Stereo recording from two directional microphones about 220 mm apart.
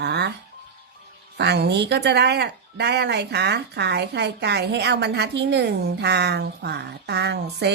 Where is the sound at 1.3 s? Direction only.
50° right (ahead or behind).